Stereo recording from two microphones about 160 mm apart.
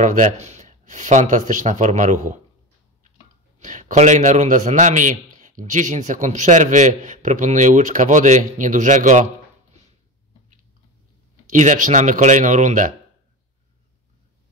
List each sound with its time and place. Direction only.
0.0 s a man's voice: 50° right (ahead or behind)
3.5 s a man's voice: 50° right (ahead or behind)
11.5 s a man's voice: 50° right (ahead or behind)